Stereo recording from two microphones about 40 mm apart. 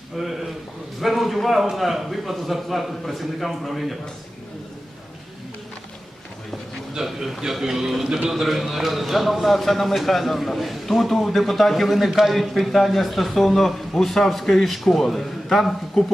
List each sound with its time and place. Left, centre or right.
0.2 s a man's voice: centre
6.9 s a man's voice: centre